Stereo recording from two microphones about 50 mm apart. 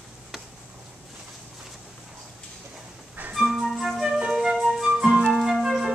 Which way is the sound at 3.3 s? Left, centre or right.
Centre.